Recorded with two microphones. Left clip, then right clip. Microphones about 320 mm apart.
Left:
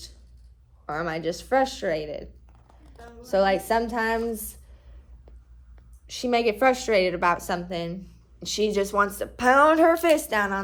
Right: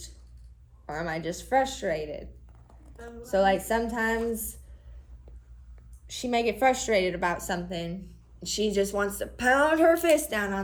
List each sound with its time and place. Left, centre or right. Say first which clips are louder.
0.9 s a woman's voice: left 4 dB; left
6.1 s a woman's voice: left 4 dB; left